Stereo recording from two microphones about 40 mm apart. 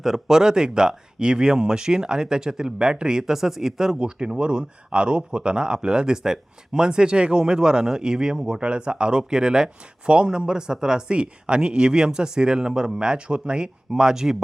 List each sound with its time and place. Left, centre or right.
0.0 s speech: centre